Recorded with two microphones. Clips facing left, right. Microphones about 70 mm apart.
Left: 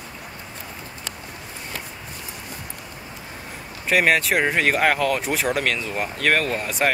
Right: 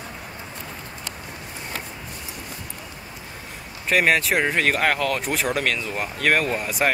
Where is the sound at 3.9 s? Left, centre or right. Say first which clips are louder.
Left 1 dB; centre.